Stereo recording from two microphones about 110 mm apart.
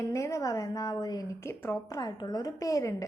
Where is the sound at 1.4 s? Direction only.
20° left (ahead or behind).